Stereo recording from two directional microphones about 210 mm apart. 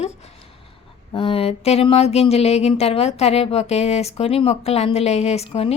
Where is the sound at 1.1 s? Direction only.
25° left (ahead or behind).